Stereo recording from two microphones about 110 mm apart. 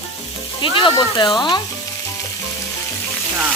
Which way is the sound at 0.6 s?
50° left (ahead or behind).